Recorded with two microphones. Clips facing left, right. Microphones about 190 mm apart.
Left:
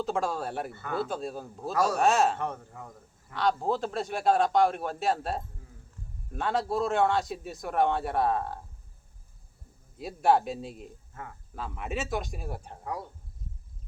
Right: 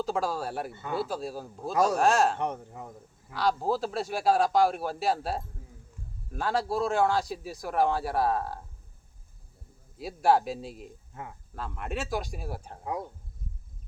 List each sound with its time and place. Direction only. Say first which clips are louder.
0.0 s a man's voice: even; centre (ahead or behind)
0.7 s speech: right 1 dB; 20° right (ahead or behind)
0.9 s a man's voice: even; centre (ahead or behind)
2.4 s speech: right 2 dB; 20° right (ahead or behind)
3.3 s a man's voice: even; centre (ahead or behind)
10.0 s a man's voice: even; centre (ahead or behind)
11.1 s speech: right 2 dB; 20° right (ahead or behind)
11.5 s a man's voice: left 1 dB; centre (ahead or behind)